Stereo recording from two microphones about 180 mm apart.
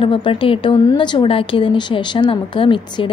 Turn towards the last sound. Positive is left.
turn(degrees=30)  # may be behind; listen again after turning